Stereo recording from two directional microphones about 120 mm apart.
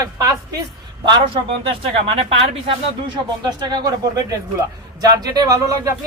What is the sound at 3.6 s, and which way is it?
Speech, 35° right (ahead or behind).